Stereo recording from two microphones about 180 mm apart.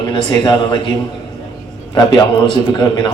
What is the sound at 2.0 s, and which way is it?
A man's voice, 25° left (ahead or behind).